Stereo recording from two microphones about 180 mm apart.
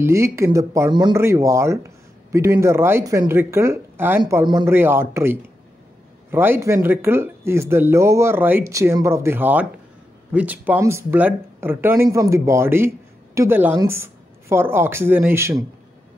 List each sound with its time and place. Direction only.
0.0 s a man's voice: 15° right (ahead or behind)